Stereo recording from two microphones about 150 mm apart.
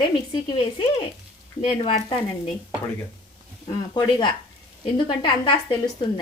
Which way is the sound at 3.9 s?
30° left (ahead or behind).